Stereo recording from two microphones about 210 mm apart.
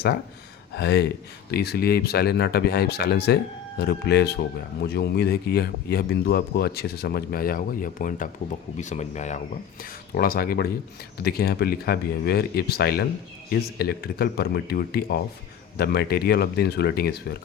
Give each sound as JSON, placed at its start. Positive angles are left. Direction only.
{"t": 0.7, "sound": "speech", "side_deg": 50}
{"t": 10.2, "sound": "speech", "side_deg": 45}